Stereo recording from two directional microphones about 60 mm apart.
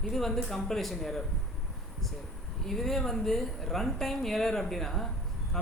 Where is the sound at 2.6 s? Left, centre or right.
Centre.